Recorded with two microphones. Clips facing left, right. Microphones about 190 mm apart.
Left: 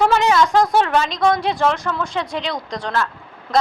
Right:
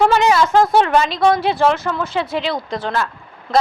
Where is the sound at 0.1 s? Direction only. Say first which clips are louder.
Right 1 dB; 5° right (ahead or behind).